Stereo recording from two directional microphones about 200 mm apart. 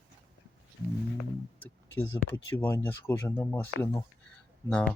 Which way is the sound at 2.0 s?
10° left (ahead or behind).